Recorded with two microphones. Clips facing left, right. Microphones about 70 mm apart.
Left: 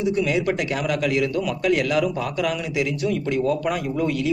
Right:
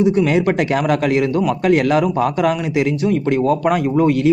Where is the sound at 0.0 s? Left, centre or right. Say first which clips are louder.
Right 7 dB; right.